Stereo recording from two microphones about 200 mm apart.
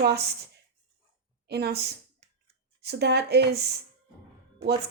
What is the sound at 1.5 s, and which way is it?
A woman's voice, 55° right (ahead or behind).